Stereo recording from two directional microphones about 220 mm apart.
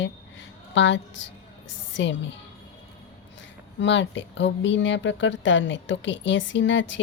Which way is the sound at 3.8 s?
55° left (ahead or behind).